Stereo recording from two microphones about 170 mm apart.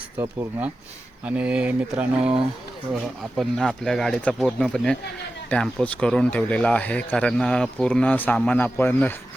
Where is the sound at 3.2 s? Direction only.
Centre (ahead or behind).